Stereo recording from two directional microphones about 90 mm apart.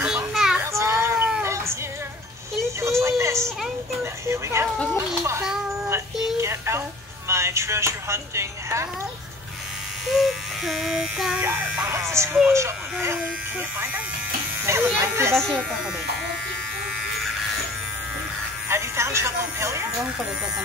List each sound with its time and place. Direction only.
0.0 s children playing: 10° right (ahead or behind)
0.7 s a sound: 30° right (ahead or behind)
1.4 s music: 30° right (ahead or behind)
2.8 s music: 30° right (ahead or behind)
4.9 s children playing: 30° right (ahead or behind)
6.4 s a sound: 30° right (ahead or behind)
7.2 s speech: 30° right (ahead or behind)
10.0 s a sound: centre (ahead or behind)
11.3 s speech: 20° right (ahead or behind)
13.2 s speech: 20° right (ahead or behind)
14.7 s speech: 30° right (ahead or behind)
15.3 s speech: 5° left (ahead or behind)
18.7 s music: 30° right (ahead or behind)